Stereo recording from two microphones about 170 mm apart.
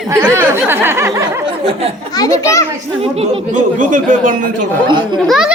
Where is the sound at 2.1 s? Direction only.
20° left (ahead or behind).